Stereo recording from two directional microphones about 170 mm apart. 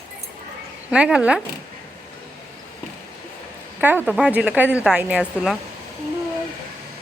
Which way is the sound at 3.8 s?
10° right (ahead or behind).